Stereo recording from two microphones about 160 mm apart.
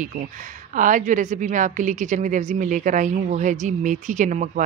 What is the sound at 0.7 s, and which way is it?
A woman's voice, 55° right (ahead or behind).